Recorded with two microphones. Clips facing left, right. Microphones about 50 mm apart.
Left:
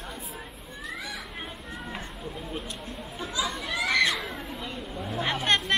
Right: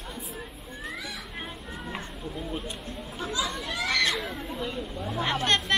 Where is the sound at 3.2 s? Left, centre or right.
Left.